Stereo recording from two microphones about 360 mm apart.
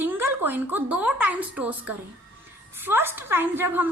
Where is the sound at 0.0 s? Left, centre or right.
Centre.